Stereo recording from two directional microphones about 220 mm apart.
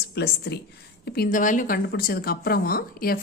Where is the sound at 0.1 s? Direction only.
45° left (ahead or behind).